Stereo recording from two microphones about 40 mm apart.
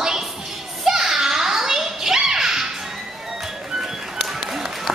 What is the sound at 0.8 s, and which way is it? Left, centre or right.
Children playing, centre.